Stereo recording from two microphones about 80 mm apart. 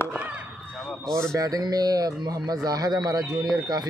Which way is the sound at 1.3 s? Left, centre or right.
Right.